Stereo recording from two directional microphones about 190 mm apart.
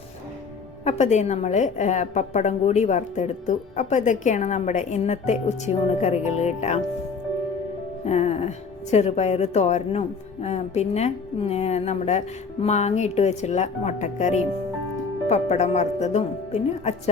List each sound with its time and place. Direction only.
0.9 s a woman's voice: 40° left (ahead or behind)
8.0 s a woman's voice: 35° left (ahead or behind)